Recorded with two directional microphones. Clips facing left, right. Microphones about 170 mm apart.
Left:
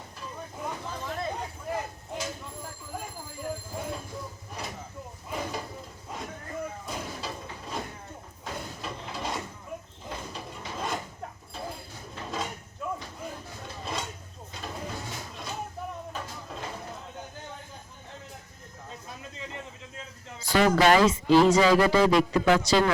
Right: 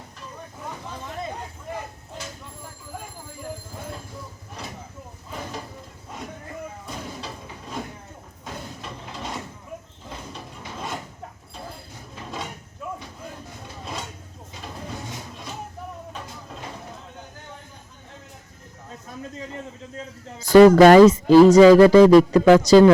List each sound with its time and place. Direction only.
10.8 s drawer open or close: centre (ahead or behind)
12.8 s a sound: 5° right (ahead or behind)
20.4 s speech: 45° right (ahead or behind)